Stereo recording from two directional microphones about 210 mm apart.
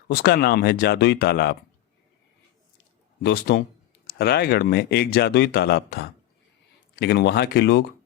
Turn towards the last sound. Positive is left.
turn(degrees=50)  # may be behind; listen again after turning